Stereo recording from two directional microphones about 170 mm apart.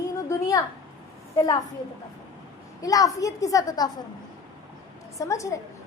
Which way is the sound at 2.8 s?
20° left (ahead or behind).